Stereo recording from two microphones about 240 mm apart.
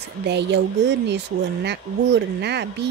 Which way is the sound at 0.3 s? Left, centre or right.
Right.